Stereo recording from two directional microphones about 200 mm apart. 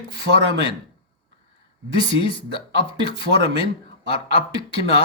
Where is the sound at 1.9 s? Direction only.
25° left (ahead or behind).